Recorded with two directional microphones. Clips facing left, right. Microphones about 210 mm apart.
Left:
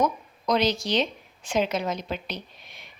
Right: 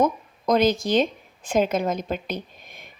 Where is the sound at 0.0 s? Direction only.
50° right (ahead or behind).